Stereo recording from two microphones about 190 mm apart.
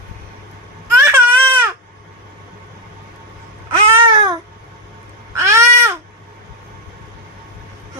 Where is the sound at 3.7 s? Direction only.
25° right (ahead or behind).